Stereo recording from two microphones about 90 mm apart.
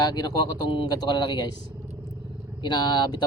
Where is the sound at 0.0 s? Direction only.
50° left (ahead or behind).